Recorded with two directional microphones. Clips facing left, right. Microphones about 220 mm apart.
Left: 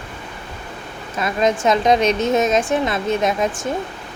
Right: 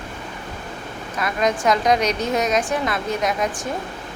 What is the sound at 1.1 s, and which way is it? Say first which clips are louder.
A woman's voice: left 3 dB; 25° left (ahead or behind).